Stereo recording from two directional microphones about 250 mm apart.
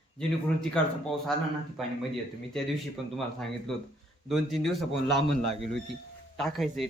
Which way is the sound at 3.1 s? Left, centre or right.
Centre.